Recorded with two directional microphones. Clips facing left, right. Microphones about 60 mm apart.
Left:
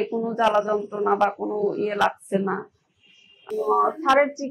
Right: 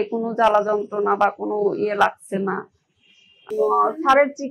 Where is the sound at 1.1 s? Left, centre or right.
Right.